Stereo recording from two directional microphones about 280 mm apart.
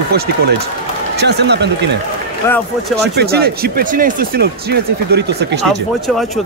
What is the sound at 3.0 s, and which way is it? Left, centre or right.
Speech, right.